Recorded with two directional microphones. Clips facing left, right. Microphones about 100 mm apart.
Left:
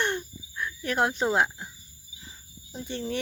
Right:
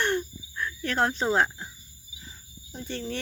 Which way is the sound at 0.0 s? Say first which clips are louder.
Right 2 dB; 15° left (ahead or behind).